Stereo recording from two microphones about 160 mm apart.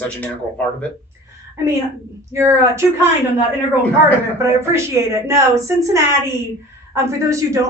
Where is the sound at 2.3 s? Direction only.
15° right (ahead or behind).